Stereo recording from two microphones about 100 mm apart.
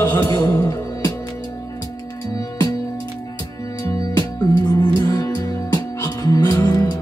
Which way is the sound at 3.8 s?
40° left (ahead or behind).